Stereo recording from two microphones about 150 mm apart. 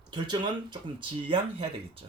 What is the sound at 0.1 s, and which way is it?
Speech, 30° right (ahead or behind).